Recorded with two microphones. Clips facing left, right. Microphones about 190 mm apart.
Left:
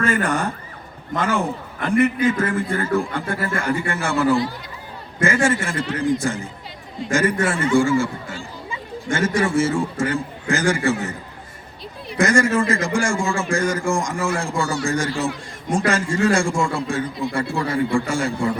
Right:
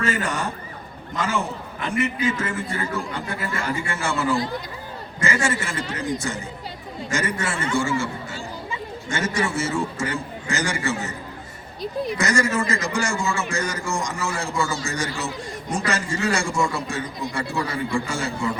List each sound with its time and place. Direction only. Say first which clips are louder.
0.0 s a man's voice: left 4 dB; 55° left (ahead or behind)
7.1 s a man's voice: left 7 dB; 50° left (ahead or behind)
9.0 s a man's voice: left 5 dB; 55° left (ahead or behind)
12.1 s a man's voice: left 7 dB; 55° left (ahead or behind)